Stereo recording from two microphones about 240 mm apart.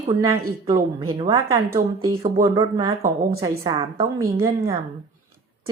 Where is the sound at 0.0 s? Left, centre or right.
Centre.